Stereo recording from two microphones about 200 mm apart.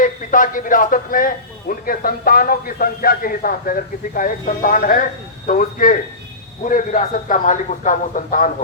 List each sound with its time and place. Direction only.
0.0 s a man's voice: 40° left (ahead or behind)